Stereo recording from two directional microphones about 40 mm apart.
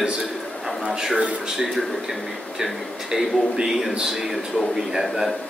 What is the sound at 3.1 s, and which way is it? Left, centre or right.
A man's voice, centre.